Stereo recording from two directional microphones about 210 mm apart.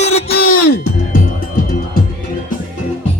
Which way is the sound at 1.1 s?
45° left (ahead or behind).